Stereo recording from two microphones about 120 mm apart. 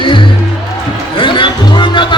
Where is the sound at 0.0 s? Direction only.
45° left (ahead or behind).